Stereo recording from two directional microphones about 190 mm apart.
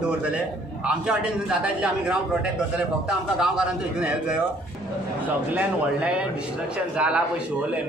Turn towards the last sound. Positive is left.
turn(degrees=-5)  # may be behind; listen again after turning